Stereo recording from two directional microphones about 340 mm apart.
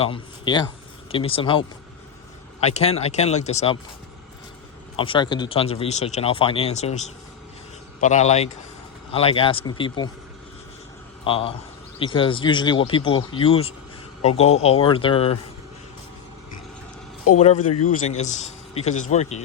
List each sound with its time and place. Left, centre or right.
0.0 s speech: centre
4.9 s speech: centre
11.2 s speech: centre
17.3 s a man's voice: centre